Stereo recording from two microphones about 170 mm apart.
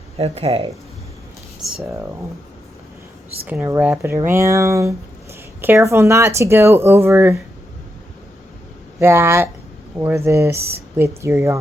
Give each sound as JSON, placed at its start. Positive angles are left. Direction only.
{"t": 0.2, "sound": "speech", "side_deg": -35}
{"t": 3.4, "sound": "speech", "side_deg": -10}
{"t": 9.0, "sound": "speech", "side_deg": -15}